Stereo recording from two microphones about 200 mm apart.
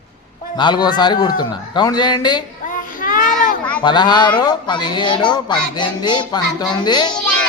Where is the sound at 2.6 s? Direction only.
40° left (ahead or behind).